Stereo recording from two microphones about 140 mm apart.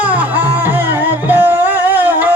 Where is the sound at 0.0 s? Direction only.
10° right (ahead or behind).